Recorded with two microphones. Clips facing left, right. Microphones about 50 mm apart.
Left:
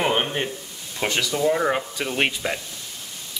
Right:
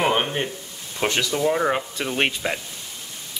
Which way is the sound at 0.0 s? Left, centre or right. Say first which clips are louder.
Right 1 dB; centre.